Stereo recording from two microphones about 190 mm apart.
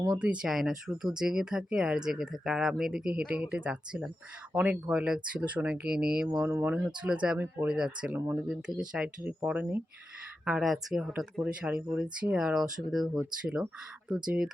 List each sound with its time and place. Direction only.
0.1 s speech: 5° right (ahead or behind)